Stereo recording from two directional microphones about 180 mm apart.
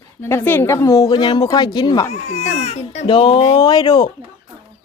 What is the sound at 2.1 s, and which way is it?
Speech, 35° left (ahead or behind).